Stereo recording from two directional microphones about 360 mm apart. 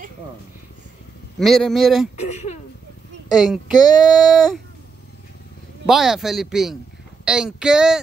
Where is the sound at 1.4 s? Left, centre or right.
Centre.